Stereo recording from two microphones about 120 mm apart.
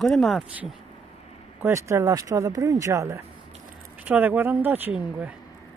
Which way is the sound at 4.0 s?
15° right (ahead or behind).